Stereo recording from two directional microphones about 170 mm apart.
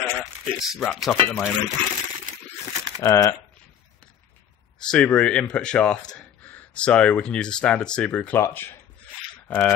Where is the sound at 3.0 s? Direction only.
15° left (ahead or behind).